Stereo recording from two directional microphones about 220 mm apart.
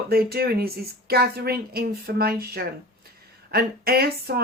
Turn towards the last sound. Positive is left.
turn(degrees=-45)  # may be behind; listen again after turning